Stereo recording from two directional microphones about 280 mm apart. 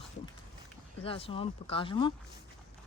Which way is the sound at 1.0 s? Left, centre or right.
Centre.